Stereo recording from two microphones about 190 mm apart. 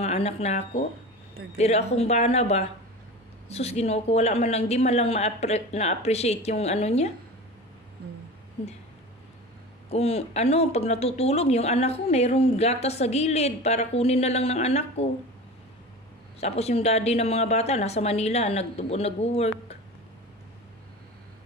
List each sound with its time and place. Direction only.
0.0 s speech: 35° left (ahead or behind)
8.0 s a sound: 55° right (ahead or behind)
9.8 s speech: 35° left (ahead or behind)
16.3 s speech: 35° left (ahead or behind)